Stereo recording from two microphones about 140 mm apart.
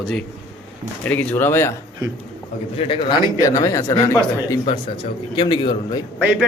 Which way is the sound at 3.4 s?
25° left (ahead or behind).